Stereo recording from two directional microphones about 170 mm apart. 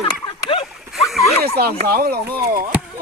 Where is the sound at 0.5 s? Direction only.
30° left (ahead or behind).